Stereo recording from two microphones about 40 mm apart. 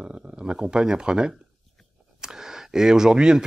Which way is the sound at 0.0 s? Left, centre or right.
Right.